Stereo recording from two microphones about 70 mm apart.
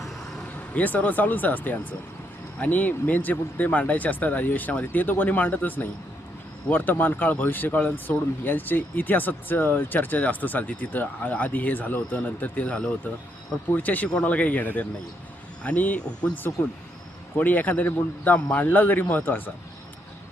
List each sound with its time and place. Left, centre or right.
0.7 s speech: left